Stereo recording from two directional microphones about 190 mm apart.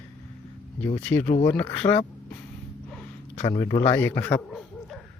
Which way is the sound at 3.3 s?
35° left (ahead or behind).